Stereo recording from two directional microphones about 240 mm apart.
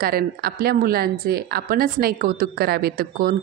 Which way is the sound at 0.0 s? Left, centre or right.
Right.